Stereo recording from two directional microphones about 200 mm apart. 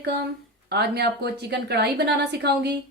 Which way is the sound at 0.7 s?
55° right (ahead or behind).